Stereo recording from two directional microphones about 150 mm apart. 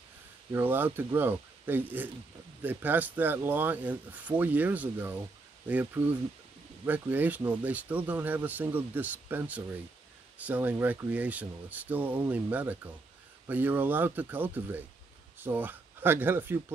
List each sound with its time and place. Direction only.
0.5 s speech: 15° right (ahead or behind)